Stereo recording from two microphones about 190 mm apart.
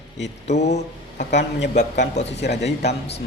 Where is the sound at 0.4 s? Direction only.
35° left (ahead or behind).